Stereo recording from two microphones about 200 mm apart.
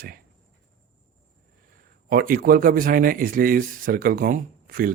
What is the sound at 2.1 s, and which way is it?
Speech, 45° right (ahead or behind).